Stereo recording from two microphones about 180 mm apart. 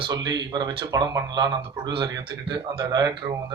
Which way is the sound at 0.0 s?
25° right (ahead or behind).